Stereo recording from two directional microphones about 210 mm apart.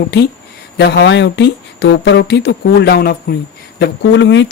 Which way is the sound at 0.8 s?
55° left (ahead or behind).